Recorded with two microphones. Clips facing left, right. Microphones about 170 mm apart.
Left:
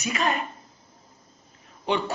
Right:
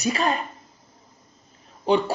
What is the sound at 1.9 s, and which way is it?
Speech, 35° right (ahead or behind).